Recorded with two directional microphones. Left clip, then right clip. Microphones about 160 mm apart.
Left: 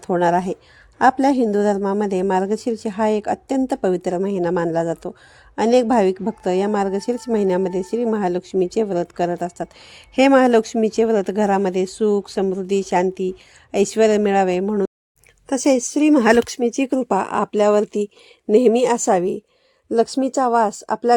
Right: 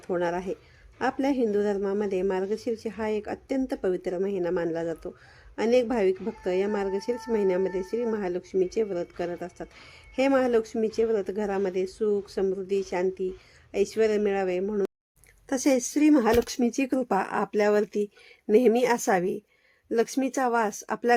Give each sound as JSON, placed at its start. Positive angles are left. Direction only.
{"t": 0.1, "sound": "a woman's voice", "side_deg": 50}
{"t": 16.1, "sound": "speech", "side_deg": 90}
{"t": 16.5, "sound": "speech", "side_deg": 35}